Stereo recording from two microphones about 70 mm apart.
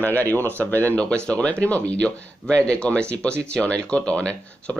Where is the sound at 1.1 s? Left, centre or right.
Centre.